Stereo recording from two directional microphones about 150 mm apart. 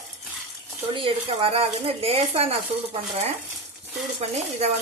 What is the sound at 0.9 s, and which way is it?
Speech, 40° right (ahead or behind).